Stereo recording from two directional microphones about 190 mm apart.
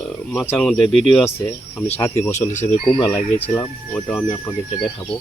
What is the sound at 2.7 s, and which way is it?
Speech, 25° left (ahead or behind).